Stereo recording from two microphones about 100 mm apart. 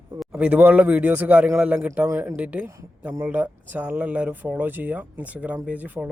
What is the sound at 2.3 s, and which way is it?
Speech, 15° right (ahead or behind).